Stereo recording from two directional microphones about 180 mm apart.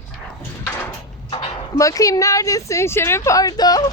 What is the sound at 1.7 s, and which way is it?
Speech, 20° left (ahead or behind).